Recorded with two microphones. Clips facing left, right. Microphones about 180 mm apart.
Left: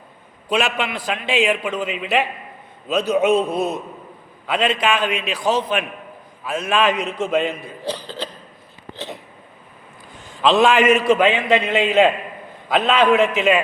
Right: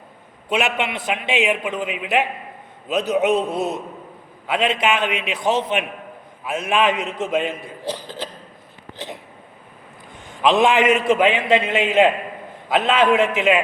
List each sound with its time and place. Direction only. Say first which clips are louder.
0.4 s a man's voice: even; 20° right (ahead or behind)
10.2 s a man's voice: left 1 dB; 20° right (ahead or behind)
11.3 s a man's voice: left 1 dB; 20° left (ahead or behind)
11.7 s a man's voice: left 3 dB; 20° right (ahead or behind)